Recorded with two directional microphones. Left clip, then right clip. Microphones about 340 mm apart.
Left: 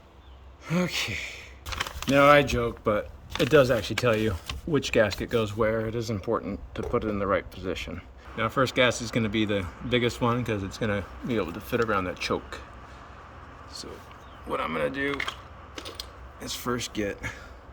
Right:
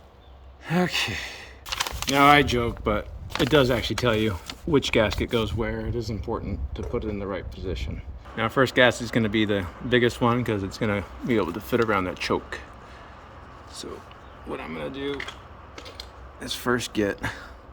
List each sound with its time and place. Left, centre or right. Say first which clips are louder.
0.6 s gasp: right 4 dB; centre
1.7 s a sound: right 2 dB; right
2.2 s speech: right 2 dB; centre
8.4 s speech: right 4 dB; centre
14.5 s speech: left 5 dB; centre
16.4 s speech: right 5 dB; centre